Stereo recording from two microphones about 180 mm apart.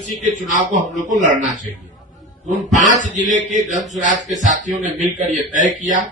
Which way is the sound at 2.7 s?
45° left (ahead or behind).